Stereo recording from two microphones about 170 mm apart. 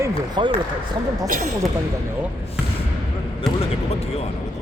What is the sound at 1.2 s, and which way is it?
Speech, 50° right (ahead or behind).